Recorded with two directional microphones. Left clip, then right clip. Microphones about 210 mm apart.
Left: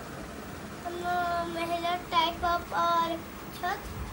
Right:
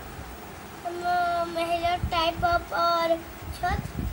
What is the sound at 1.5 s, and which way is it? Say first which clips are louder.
Child singing: right 5 dB; 15° right (ahead or behind).